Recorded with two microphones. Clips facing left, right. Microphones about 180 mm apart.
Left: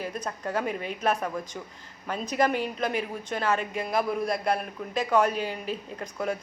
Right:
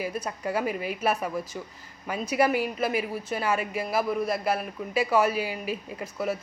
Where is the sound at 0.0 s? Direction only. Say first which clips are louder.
Right 2 dB; 10° right (ahead or behind).